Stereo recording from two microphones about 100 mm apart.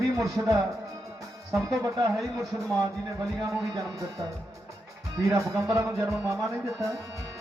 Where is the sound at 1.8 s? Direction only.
35° right (ahead or behind).